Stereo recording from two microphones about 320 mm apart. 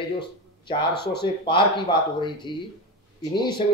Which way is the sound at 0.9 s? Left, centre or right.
Left.